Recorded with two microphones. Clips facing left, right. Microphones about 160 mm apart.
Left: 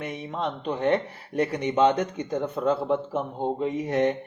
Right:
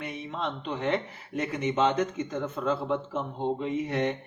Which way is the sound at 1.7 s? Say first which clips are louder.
Left 4 dB; 15° left (ahead or behind).